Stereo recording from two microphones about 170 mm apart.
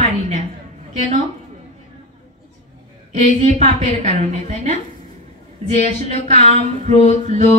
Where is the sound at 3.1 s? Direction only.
40° right (ahead or behind).